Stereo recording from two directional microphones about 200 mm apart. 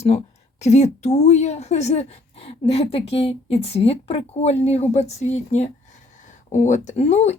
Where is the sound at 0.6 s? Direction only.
35° left (ahead or behind).